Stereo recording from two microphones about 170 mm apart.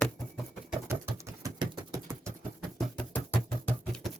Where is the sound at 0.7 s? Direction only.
15° right (ahead or behind).